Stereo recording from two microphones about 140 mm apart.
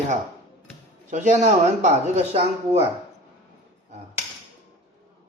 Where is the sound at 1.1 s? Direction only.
60° right (ahead or behind).